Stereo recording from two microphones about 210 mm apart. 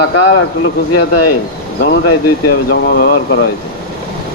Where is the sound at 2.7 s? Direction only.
45° left (ahead or behind).